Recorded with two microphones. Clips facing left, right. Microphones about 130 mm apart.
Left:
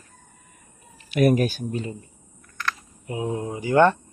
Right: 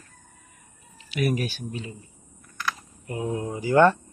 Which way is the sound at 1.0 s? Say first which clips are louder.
Left 7 dB; 45° left (ahead or behind).